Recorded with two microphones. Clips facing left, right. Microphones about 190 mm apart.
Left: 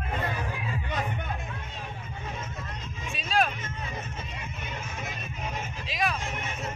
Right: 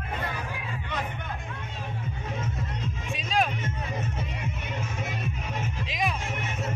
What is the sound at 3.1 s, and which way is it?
Music, 15° right (ahead or behind).